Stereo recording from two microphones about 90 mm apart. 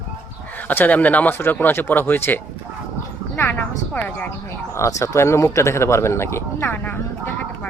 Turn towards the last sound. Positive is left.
turn(degrees=20)  # may be behind; listen again after turning